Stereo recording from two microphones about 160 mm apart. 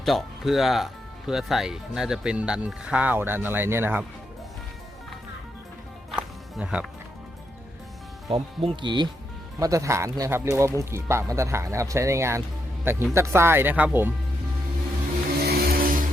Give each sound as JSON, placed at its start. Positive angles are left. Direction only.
{"t": 0.0, "sound": "speech", "side_deg": 0}
{"t": 6.1, "sound": "music", "side_deg": -5}
{"t": 8.3, "sound": "speech", "side_deg": -35}
{"t": 15.4, "sound": "vehicle", "side_deg": -75}